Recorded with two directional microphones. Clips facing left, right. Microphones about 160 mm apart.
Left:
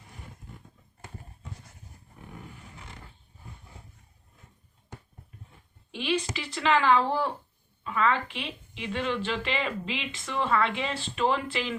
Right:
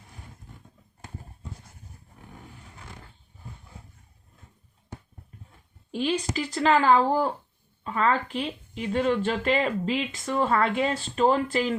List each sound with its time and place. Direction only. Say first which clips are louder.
5.9 s speech: right 3 dB; 40° right (ahead or behind)